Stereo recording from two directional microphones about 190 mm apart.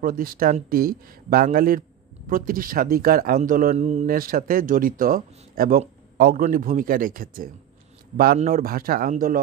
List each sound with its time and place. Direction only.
0.0 s speech: 50° right (ahead or behind)